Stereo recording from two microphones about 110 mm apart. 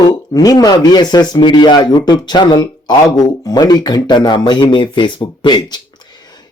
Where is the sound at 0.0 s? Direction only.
35° left (ahead or behind).